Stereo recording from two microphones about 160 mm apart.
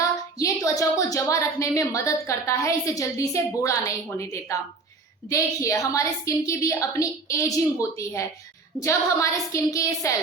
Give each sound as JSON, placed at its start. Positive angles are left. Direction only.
{"t": 0.0, "sound": "a woman's voice", "side_deg": 20}